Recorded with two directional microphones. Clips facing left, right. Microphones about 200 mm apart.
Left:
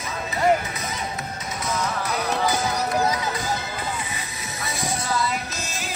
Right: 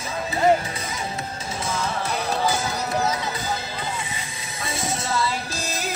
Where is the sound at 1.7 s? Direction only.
25° right (ahead or behind).